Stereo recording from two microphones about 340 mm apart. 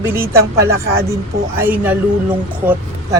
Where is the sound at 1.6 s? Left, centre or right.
Centre.